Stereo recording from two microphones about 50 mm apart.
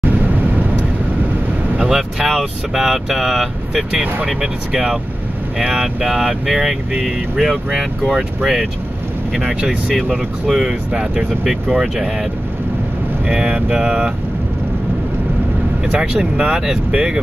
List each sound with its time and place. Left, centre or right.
0.2 s vehicle: right
1.8 s speech: centre
3.9 s speech: right
4.3 s speech: centre
13.3 s speech: centre
15.9 s speech: centre